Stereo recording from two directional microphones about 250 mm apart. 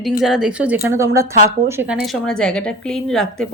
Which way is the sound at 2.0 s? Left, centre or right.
Centre.